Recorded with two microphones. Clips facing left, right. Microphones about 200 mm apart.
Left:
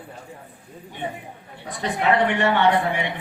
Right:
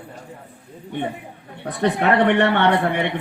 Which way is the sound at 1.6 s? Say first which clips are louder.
Right 3 dB; 60° right (ahead or behind).